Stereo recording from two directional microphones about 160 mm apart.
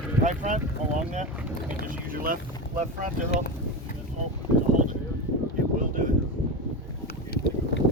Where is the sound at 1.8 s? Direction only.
60° right (ahead or behind).